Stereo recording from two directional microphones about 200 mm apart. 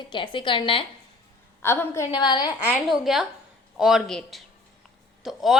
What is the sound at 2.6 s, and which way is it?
A woman's voice, 5° right (ahead or behind).